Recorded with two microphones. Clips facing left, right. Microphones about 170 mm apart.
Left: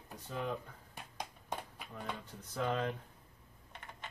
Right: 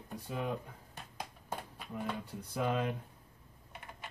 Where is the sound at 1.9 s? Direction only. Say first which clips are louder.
Right 5 dB; 10° right (ahead or behind).